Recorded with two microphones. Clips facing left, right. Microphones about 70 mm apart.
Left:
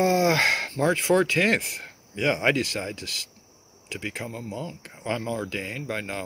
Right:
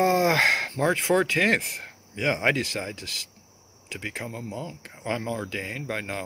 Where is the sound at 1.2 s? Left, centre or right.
Right.